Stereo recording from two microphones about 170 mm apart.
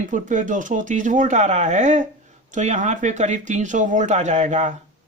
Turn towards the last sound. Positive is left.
turn(degrees=-45)  # may be behind; listen again after turning